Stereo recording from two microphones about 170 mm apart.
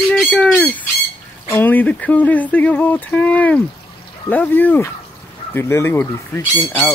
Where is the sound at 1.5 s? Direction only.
10° left (ahead or behind).